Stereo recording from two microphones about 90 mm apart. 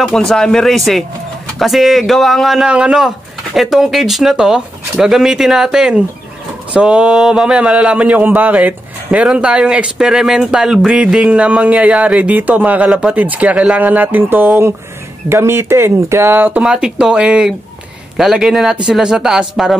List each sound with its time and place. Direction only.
0.1 s speech: 5° left (ahead or behind); by 16.6 s 20° right (ahead or behind)
16.6 s speech: 10° right (ahead or behind)